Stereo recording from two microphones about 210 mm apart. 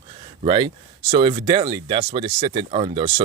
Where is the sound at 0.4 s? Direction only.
25° right (ahead or behind).